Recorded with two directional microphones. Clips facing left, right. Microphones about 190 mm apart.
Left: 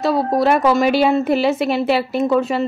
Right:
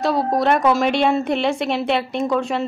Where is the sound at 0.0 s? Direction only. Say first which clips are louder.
Left 2 dB; centre (ahead or behind).